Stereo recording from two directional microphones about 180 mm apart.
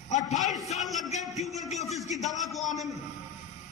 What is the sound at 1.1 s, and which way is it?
Speech, 40° left (ahead or behind).